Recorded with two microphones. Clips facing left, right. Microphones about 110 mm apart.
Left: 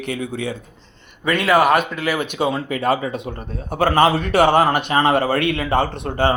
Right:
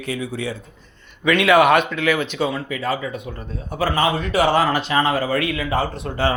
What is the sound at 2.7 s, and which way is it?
A man's voice, 60° left (ahead or behind).